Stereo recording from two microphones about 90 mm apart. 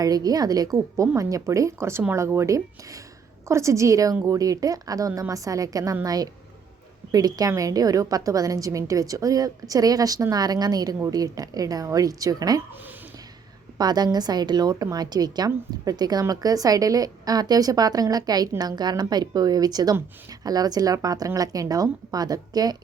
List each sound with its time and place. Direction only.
0.0 s a woman's voice: 45° right (ahead or behind)
13.7 s a woman's voice: 50° right (ahead or behind)